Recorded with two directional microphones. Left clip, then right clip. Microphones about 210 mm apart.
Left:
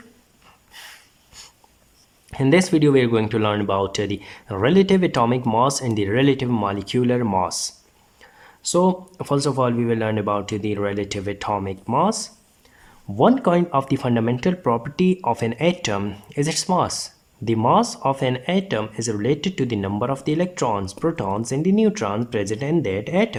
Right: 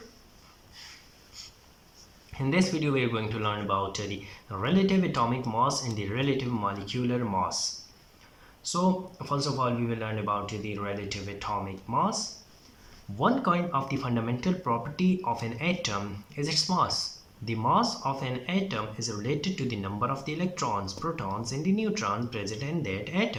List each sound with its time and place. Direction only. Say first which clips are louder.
0.8 s wheeze: left 7 dB; 50° left (ahead or behind)
2.3 s speech: left 11 dB; 45° left (ahead or behind)
8.7 s speech: left 9 dB; 50° left (ahead or behind)